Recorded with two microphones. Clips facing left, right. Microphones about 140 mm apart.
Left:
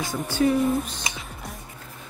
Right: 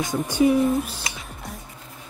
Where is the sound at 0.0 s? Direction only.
15° right (ahead or behind).